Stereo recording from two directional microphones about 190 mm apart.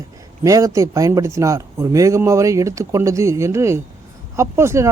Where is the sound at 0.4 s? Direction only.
15° right (ahead or behind).